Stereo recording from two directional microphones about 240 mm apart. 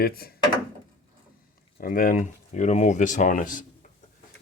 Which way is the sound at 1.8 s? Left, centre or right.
Left.